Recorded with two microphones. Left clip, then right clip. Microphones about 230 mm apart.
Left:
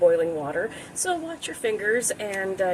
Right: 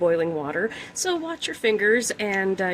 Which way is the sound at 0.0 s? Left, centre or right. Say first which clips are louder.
Left 2 dB; right.